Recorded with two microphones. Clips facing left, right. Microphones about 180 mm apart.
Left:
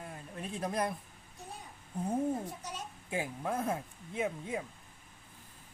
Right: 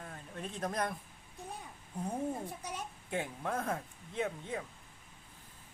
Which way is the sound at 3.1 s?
5° left (ahead or behind).